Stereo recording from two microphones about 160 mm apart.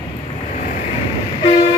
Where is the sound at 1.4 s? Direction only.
35° left (ahead or behind).